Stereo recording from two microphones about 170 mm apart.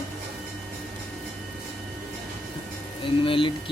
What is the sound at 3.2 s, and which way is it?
Speech, 30° left (ahead or behind).